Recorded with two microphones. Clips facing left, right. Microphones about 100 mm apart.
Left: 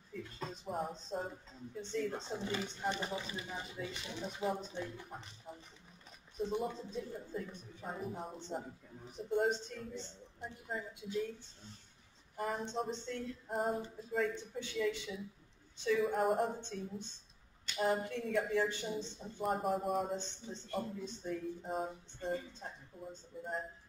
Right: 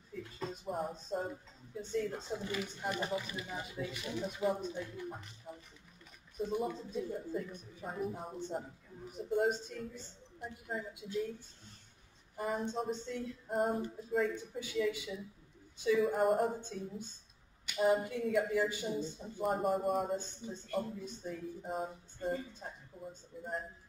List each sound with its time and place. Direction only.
0.4 s speech: centre (ahead or behind)
2.1 s speech: 25° left (ahead or behind)
3.4 s speech: 5° right (ahead or behind)
22.9 s a sound: 5° right (ahead or behind)